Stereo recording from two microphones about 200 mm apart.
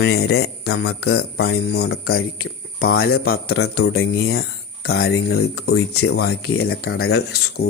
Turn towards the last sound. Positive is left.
turn(degrees=55)  # may be behind; listen again after turning